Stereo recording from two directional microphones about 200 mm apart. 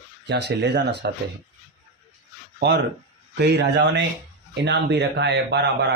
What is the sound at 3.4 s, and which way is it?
Speech, 55° right (ahead or behind).